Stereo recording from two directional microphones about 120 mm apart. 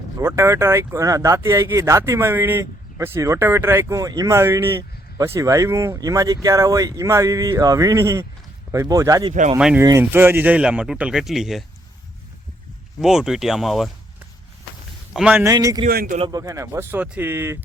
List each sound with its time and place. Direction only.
0.2 s speech: 25° right (ahead or behind)
10.0 s a man's voice: 20° right (ahead or behind); by 11.6 s centre (ahead or behind)
13.0 s speech: 5° right (ahead or behind)
15.1 s speech: 10° right (ahead or behind)
15.8 s a man's voice: 60° right (ahead or behind)
16.3 s speech: 25° right (ahead or behind)